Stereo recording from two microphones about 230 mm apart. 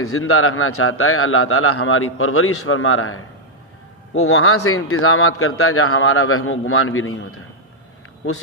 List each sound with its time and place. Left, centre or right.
0.0 s a man's voice: left